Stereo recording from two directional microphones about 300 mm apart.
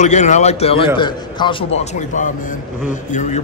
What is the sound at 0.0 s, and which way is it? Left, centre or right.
A man's voice, left.